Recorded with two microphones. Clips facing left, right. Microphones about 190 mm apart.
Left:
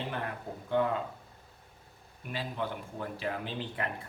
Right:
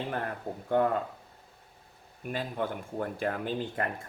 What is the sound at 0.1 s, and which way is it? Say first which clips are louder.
Speech: right 3 dB; 45° right (ahead or behind).